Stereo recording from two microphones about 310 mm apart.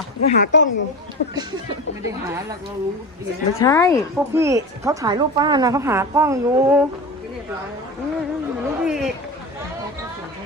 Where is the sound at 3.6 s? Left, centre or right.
Centre.